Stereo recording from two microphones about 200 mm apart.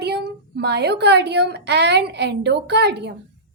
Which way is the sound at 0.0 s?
55° right (ahead or behind).